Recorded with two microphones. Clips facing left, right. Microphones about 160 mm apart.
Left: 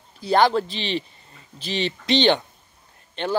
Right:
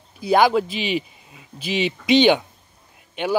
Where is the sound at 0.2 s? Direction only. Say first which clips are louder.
Right 2 dB; 10° right (ahead or behind).